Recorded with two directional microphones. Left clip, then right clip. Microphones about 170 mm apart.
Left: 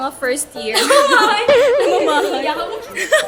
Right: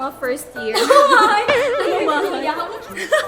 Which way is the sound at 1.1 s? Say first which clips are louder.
Even; centre (ahead or behind).